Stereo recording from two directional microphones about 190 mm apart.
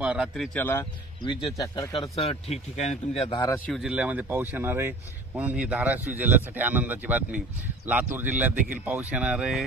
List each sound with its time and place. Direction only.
0.0 s speech: 5° right (ahead or behind)
1.2 s speech: 20° left (ahead or behind)
2.1 s speech: 35° left (ahead or behind)
3.5 s speech: 5° left (ahead or behind)
3.8 s speech: 5° right (ahead or behind)